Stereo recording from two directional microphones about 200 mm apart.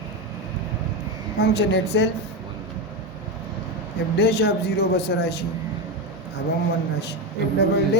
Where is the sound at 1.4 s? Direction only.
55° left (ahead or behind).